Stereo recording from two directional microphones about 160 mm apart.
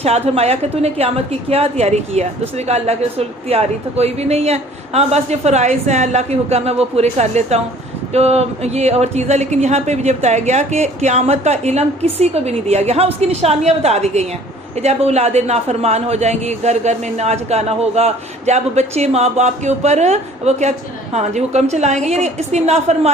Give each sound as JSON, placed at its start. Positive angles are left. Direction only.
{"t": 0.0, "sound": "a man's voice", "side_deg": -40}